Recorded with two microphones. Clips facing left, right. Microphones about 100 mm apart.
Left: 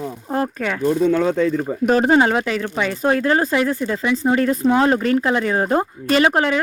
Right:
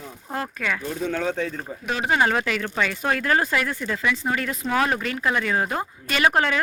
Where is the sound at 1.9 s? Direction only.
40° left (ahead or behind).